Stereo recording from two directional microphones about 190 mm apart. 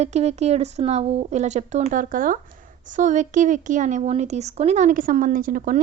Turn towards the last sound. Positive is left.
turn(degrees=-45)  # may be behind; listen again after turning